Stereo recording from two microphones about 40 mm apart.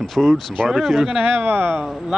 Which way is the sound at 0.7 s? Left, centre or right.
Centre.